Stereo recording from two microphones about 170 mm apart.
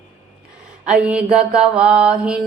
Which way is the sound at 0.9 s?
5° right (ahead or behind).